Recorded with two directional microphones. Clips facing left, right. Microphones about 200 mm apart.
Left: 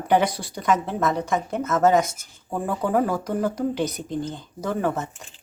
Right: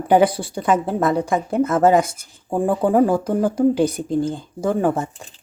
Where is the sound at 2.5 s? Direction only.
30° right (ahead or behind).